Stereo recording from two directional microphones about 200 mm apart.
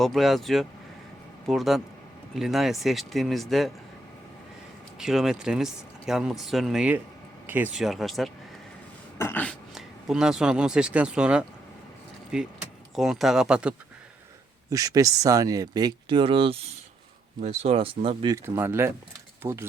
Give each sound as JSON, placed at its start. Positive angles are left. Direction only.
{"t": 0.0, "sound": "speech", "side_deg": 0}
{"t": 4.9, "sound": "speech", "side_deg": 0}
{"t": 9.1, "sound": "speech", "side_deg": 10}
{"t": 14.7, "sound": "speech", "side_deg": -15}
{"t": 18.4, "sound": "speech", "side_deg": -10}